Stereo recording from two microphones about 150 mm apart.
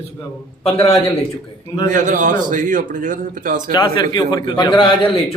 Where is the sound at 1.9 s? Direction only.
60° right (ahead or behind).